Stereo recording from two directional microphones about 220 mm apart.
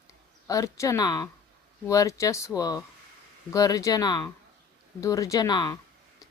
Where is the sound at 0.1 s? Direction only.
15° left (ahead or behind).